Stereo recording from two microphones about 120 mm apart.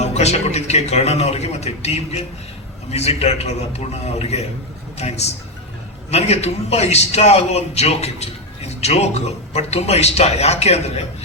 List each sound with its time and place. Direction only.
0.0 s a man's voice: 65° left (ahead or behind)